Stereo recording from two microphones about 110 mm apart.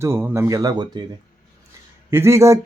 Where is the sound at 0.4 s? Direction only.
35° right (ahead or behind).